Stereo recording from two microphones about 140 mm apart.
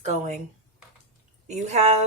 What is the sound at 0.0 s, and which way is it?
Speech, 55° right (ahead or behind).